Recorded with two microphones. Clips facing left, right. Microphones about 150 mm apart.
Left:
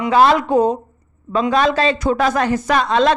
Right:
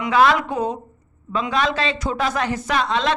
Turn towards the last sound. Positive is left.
turn(degrees=45)  # may be behind; listen again after turning